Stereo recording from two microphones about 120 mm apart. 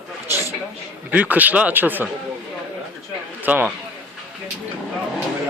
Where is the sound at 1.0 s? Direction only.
15° right (ahead or behind).